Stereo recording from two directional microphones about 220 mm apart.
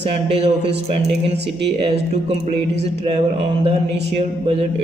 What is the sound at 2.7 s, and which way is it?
Speech, 30° right (ahead or behind).